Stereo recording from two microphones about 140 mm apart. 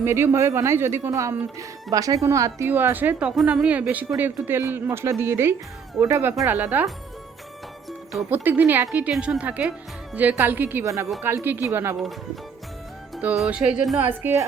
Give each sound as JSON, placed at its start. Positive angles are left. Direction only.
{"t": 0.0, "sound": "speech", "side_deg": -15}
{"t": 8.3, "sound": "speech", "side_deg": -10}
{"t": 13.2, "sound": "speech", "side_deg": -5}
{"t": 14.1, "sound": "speech", "side_deg": -15}